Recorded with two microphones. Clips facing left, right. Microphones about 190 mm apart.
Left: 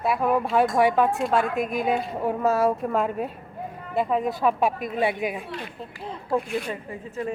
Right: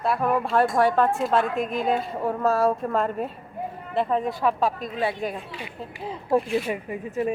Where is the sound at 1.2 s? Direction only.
Centre (ahead or behind).